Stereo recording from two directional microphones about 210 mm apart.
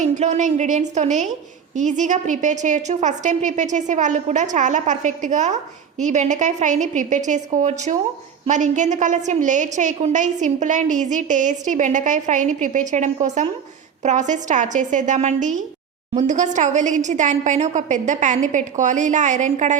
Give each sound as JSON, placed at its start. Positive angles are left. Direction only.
{"t": 0.0, "sound": "a woman's voice", "side_deg": -35}